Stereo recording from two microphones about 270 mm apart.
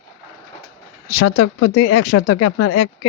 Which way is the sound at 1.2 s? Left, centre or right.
Left.